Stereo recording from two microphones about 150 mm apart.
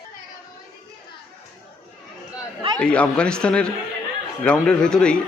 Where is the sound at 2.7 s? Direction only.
5° left (ahead or behind).